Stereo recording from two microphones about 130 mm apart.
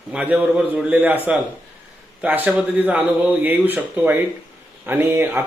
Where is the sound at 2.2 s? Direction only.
15° right (ahead or behind).